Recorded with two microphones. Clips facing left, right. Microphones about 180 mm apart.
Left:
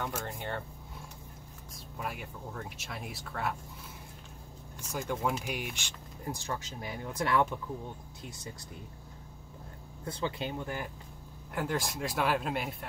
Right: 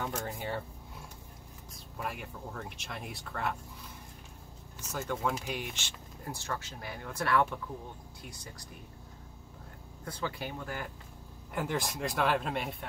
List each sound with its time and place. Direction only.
0.3 s speech: 5° right (ahead or behind)
2.0 s speech: centre (ahead or behind)
4.7 s speech: 10° left (ahead or behind)
10.0 s speech: 25° left (ahead or behind)
11.5 s speech: centre (ahead or behind)